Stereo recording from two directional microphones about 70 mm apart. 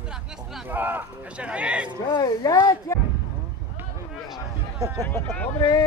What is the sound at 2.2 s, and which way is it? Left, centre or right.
Speech, left.